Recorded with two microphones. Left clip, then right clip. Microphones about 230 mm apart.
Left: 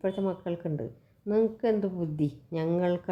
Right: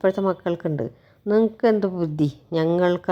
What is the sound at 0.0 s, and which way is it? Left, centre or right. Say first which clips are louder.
Speech: right 10 dB; right.